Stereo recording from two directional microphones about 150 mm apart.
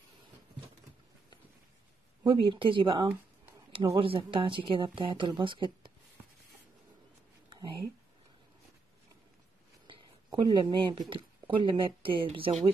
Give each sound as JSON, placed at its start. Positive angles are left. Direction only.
{"t": 2.2, "sound": "speech", "side_deg": -35}
{"t": 9.8, "sound": "speech", "side_deg": -30}